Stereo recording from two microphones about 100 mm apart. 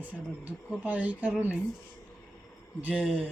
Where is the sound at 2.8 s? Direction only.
10° right (ahead or behind).